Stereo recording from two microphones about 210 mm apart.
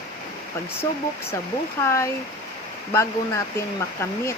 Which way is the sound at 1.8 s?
15° left (ahead or behind).